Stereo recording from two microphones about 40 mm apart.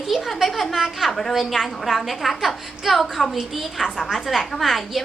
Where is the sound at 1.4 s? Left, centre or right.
Centre.